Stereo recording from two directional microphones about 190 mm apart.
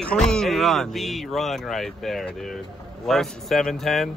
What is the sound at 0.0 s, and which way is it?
A man's voice, 5° left (ahead or behind).